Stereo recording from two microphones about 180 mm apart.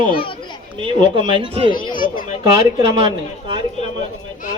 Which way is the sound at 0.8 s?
30° right (ahead or behind).